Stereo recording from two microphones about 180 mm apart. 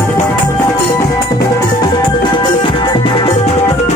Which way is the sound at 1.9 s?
25° left (ahead or behind).